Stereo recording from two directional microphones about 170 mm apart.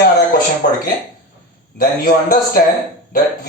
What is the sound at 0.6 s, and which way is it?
Speech, 50° left (ahead or behind).